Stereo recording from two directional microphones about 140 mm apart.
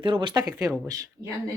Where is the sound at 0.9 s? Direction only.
25° right (ahead or behind).